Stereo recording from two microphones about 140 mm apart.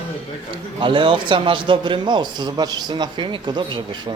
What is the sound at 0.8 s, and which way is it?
A man's voice, 35° right (ahead or behind).